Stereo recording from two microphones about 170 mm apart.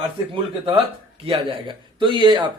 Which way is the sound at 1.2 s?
30° right (ahead or behind).